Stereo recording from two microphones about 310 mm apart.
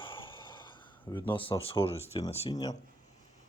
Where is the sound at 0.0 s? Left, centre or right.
Centre.